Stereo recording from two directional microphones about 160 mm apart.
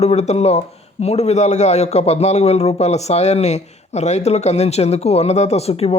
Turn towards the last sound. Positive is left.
turn(degrees=40)  # may be behind; listen again after turning